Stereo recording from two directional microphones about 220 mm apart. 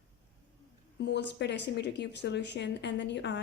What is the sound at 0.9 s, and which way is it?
Speech, 50° left (ahead or behind).